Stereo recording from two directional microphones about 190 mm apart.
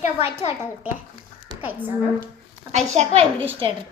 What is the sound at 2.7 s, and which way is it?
Speech, 35° right (ahead or behind).